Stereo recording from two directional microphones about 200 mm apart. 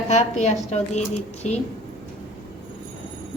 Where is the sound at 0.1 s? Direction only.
35° left (ahead or behind).